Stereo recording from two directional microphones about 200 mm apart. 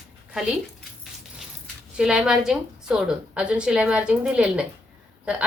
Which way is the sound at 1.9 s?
5° right (ahead or behind).